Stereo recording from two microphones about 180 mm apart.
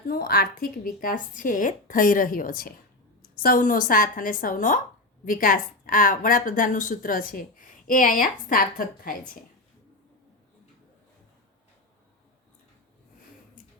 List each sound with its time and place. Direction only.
0.1 s a woman's voice: 55° left (ahead or behind)